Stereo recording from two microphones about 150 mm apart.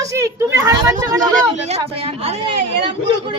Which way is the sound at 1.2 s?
60° right (ahead or behind).